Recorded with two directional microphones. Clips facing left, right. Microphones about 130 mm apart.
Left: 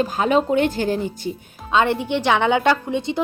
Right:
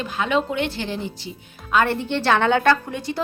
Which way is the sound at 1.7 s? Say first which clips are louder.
Left 2 dB; 20° left (ahead or behind).